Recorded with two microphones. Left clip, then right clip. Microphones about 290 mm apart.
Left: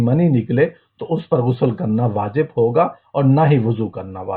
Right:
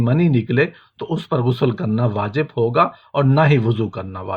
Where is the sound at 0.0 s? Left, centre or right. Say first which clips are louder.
Left 1 dB; right.